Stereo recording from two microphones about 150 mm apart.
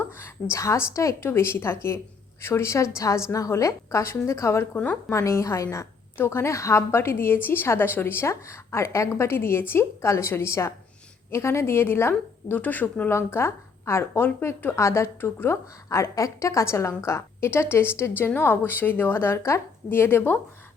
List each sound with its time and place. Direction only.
0.5 s a woman's voice: 20° left (ahead or behind)